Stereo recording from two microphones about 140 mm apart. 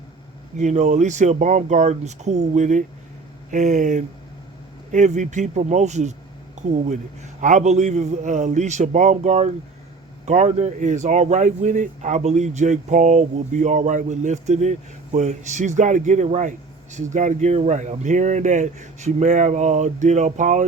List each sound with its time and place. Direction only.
0.5 s speech: 55° right (ahead or behind)